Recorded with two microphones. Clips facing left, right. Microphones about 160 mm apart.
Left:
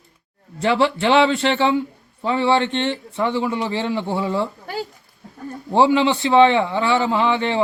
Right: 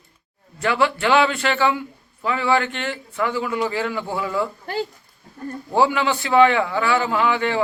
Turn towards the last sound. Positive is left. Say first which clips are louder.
# left 1 dB
turn(degrees=25)  # may be behind; listen again after turning